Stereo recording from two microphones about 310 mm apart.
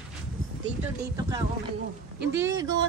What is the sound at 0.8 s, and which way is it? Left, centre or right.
Speech, centre.